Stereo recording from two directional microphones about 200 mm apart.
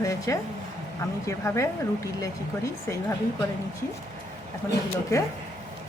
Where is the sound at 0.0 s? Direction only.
15° left (ahead or behind).